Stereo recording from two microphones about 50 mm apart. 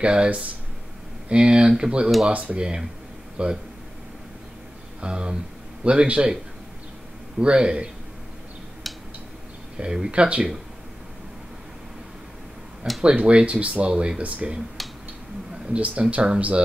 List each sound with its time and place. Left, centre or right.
0.0 s speech: right
5.0 s speech: centre
7.3 s speech: centre
9.8 s speech: centre
13.1 s speech: right
14.8 s a sound: centre
15.5 s a sound: centre
15.8 s speech: right